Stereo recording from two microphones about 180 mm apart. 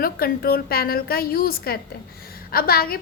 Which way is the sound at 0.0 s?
55° left (ahead or behind).